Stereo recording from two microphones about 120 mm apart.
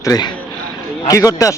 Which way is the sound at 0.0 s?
30° left (ahead or behind).